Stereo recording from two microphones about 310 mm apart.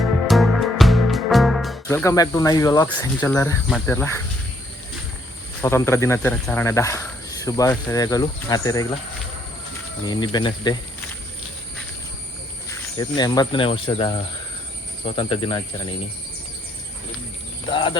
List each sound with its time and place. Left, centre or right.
0.3 s music: centre
5.6 s speech: centre
10.0 s speech: centre
13.0 s speech: centre
17.7 s speech: centre